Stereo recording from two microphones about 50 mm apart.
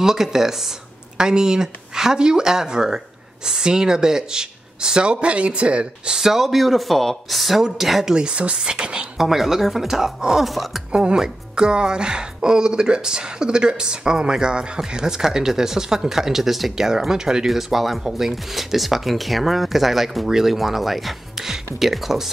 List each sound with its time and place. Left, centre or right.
0.0 s speech: centre
6.1 s speech: centre
9.2 s speech: centre
10.9 s speech: centre